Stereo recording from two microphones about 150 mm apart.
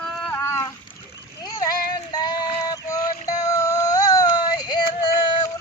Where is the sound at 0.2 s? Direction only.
15° left (ahead or behind).